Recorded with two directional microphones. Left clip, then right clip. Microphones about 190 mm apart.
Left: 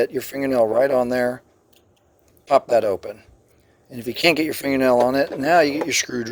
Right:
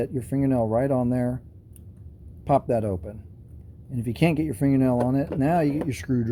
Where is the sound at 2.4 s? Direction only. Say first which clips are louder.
Left 6 dB; 25° left (ahead or behind).